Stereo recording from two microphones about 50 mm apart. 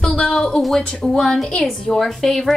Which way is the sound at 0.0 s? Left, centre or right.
Centre.